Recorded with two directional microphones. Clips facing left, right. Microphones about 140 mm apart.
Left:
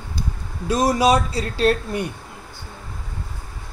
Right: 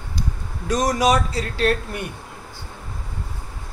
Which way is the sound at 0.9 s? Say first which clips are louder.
Left 1 dB; 30° left (ahead or behind).